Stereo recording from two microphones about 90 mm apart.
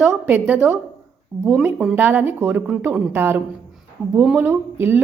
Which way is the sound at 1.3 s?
5° left (ahead or behind).